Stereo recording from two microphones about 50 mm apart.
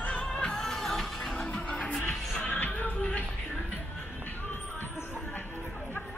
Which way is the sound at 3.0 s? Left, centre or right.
Left.